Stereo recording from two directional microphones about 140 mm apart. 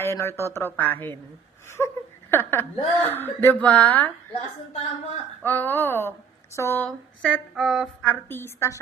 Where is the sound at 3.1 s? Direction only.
15° left (ahead or behind).